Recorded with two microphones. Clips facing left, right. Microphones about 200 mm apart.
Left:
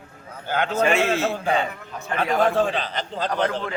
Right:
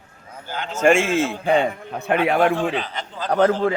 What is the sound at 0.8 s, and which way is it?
A man's voice, 50° right (ahead or behind).